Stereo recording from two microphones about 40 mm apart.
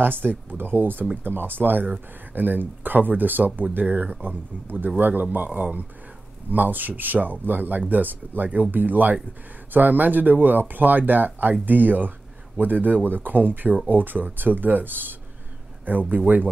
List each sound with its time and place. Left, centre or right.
0.0 s speech: right
3.8 s speech: right
4.6 s speech: right